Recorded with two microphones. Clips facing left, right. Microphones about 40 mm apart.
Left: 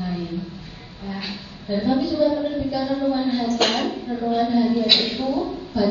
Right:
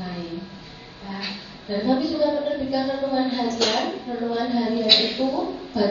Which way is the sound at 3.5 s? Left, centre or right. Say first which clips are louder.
Left 2 dB; left.